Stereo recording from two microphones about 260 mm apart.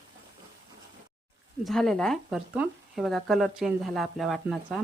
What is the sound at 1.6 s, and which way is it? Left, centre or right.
Speech, centre.